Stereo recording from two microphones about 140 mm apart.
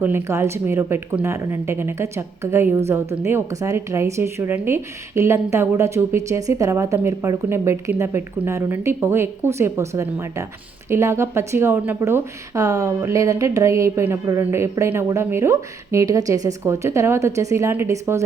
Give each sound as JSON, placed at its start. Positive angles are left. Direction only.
{"t": 0.0, "sound": "speech", "side_deg": -20}